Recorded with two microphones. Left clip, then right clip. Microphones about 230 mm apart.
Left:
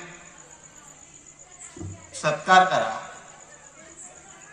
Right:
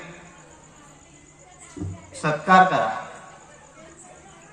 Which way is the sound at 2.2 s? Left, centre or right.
Left.